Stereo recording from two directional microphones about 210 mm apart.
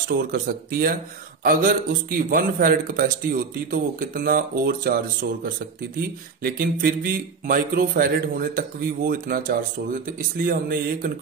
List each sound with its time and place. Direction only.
0.3 s speech: 45° right (ahead or behind)